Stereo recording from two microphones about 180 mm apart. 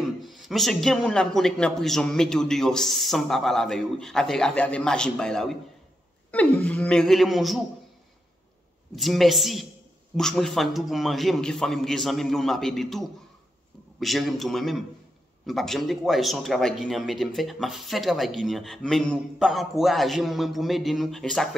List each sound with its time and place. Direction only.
0.2 s speech: centre (ahead or behind)
8.9 s speech: centre (ahead or behind)